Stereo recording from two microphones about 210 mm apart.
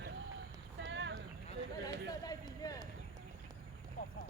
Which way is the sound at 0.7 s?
60° right (ahead or behind).